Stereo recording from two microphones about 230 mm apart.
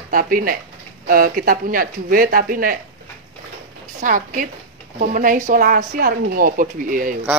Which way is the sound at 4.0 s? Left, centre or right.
Right.